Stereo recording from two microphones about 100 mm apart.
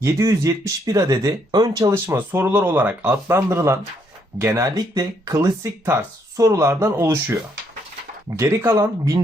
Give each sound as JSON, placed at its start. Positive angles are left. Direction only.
{"t": 0.0, "sound": "speech", "side_deg": -30}
{"t": 1.9, "sound": "speech", "side_deg": -25}
{"t": 3.2, "sound": "speech", "side_deg": -25}
{"t": 8.7, "sound": "speech", "side_deg": -35}